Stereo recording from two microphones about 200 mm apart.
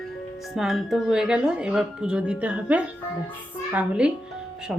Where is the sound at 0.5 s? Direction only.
Centre (ahead or behind).